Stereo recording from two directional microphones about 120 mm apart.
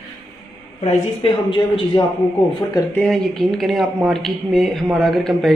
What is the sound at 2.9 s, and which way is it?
Speech, 5° left (ahead or behind).